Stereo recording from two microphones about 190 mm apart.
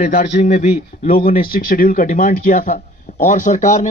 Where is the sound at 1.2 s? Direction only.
50° left (ahead or behind).